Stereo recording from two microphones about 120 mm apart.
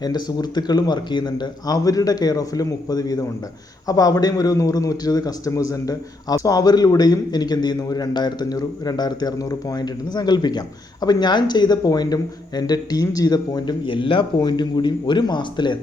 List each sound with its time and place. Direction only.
0.0 s a man's voice: 35° left (ahead or behind)